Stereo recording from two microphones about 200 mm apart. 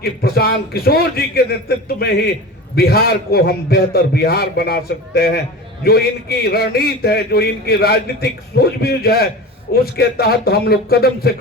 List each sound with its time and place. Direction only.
0.0 s a man's voice: 50° left (ahead or behind)